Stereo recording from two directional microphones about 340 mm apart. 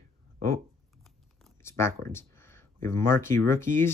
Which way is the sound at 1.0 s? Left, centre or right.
Centre.